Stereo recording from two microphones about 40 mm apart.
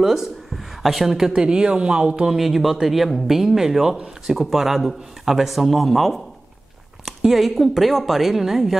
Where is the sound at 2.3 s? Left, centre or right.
Centre.